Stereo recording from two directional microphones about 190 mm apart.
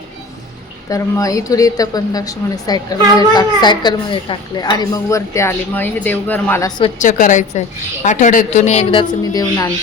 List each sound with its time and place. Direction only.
0.9 s a woman's voice: 15° left (ahead or behind)
7.0 s a woman's voice: 40° left (ahead or behind); by 9.7 s 20° left (ahead or behind)